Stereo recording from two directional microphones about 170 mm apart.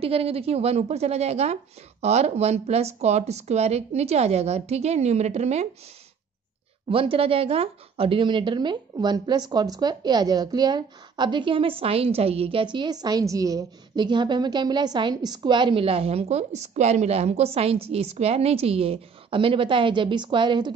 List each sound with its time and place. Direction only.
0.0 s a woman's voice: 35° right (ahead or behind)
6.9 s speech: 35° right (ahead or behind)